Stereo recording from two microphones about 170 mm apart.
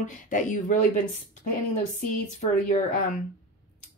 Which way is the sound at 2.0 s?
50° left (ahead or behind).